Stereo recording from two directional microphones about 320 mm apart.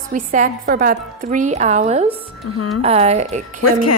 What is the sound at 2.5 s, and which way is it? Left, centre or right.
Speech, left.